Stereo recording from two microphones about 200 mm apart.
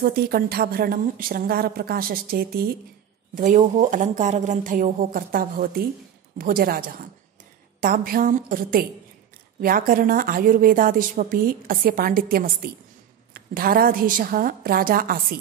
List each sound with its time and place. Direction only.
0.0 s speech: 50° right (ahead or behind)
3.3 s speech: 40° right (ahead or behind)